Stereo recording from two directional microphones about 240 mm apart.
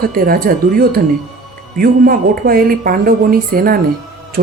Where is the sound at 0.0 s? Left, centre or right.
Right.